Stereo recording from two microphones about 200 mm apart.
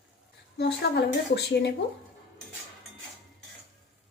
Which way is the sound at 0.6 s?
55° left (ahead or behind).